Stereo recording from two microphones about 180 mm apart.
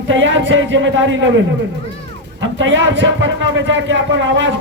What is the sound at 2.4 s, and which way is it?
Speech, 90° right.